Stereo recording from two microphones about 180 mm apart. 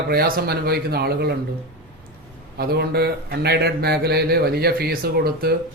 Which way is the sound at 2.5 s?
60° right (ahead or behind).